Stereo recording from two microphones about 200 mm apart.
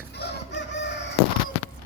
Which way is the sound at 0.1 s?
55° left (ahead or behind).